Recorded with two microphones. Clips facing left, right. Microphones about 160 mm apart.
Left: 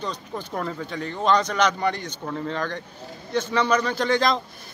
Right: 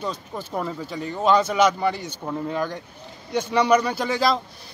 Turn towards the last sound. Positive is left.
turn(degrees=-5)  # may be behind; listen again after turning